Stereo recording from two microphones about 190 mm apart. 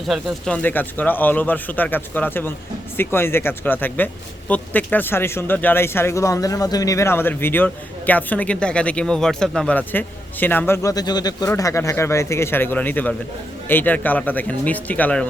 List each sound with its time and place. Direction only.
0.1 s speech: centre (ahead or behind)